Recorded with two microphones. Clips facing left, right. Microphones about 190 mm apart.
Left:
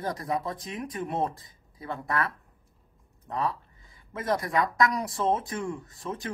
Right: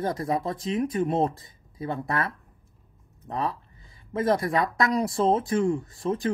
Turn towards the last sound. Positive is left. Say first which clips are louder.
# right 8 dB
turn(degrees=-30)  # may be behind; listen again after turning